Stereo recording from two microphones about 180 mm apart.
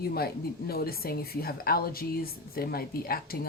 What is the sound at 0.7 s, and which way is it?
A woman's voice, 55° left (ahead or behind).